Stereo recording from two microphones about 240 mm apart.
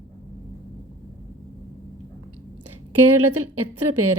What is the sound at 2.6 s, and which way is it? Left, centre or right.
A woman's voice, right.